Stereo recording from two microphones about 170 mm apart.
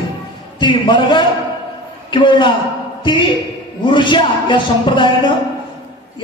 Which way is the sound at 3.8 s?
30° left (ahead or behind).